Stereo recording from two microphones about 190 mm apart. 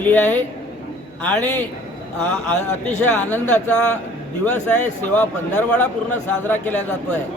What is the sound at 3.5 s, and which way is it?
Speech, 5° left (ahead or behind).